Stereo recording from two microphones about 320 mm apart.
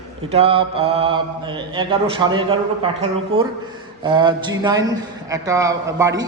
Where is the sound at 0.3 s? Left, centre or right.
Centre.